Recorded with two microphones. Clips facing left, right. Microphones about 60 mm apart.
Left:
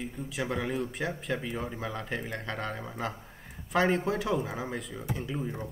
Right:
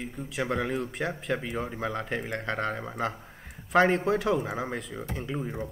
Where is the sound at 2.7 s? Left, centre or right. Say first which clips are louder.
Right 4 dB; centre.